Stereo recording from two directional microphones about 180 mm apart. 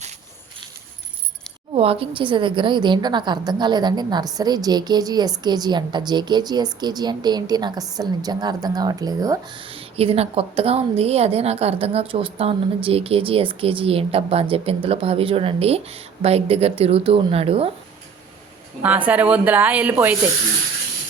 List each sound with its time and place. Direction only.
1.7 s a woman's voice: 35° right (ahead or behind)
9.7 s a woman's voice: 35° right (ahead or behind)
18.8 s a woman's voice: 10° right (ahead or behind)